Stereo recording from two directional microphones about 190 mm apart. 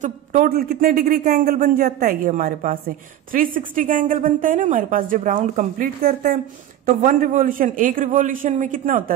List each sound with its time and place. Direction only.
0.0 s speech: 40° right (ahead or behind)